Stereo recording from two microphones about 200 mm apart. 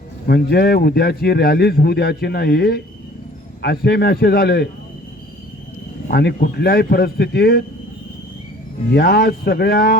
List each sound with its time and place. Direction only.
0.3 s speech: 50° left (ahead or behind)
6.1 s speech: 50° left (ahead or behind)
8.9 s speech: 55° left (ahead or behind)